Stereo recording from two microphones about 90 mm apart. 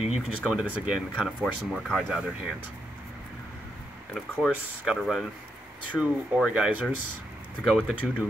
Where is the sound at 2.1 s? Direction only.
10° right (ahead or behind).